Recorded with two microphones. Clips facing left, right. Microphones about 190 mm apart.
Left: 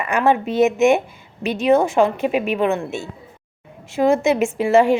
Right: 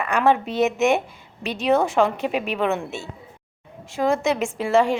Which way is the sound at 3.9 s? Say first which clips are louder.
Left 5 dB; 25° left (ahead or behind).